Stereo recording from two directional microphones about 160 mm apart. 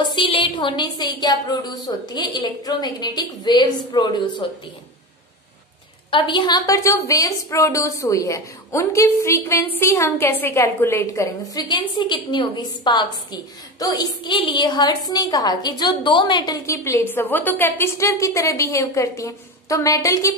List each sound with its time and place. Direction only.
0.0 s a woman's voice: 30° left (ahead or behind)
6.0 s a woman's voice: 30° left (ahead or behind)